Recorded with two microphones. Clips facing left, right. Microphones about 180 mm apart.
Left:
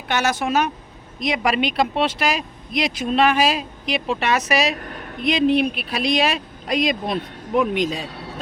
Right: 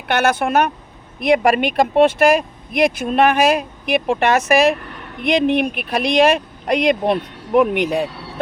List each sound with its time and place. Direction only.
0.1 s speech: 55° right (ahead or behind)
4.8 s a sound: 45° left (ahead or behind)
5.2 s speech: 55° right (ahead or behind)
6.7 s speech: 60° right (ahead or behind)